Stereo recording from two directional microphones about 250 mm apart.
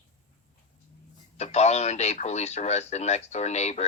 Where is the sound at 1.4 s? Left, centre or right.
Left.